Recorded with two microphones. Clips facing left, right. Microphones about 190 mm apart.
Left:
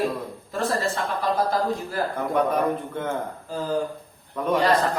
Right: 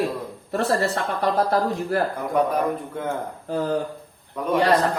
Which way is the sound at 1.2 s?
65° right (ahead or behind).